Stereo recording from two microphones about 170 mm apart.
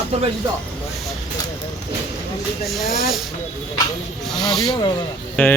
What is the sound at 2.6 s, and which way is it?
Speech, centre (ahead or behind).